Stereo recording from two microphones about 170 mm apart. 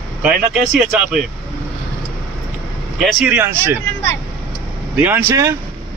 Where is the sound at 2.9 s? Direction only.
Centre (ahead or behind).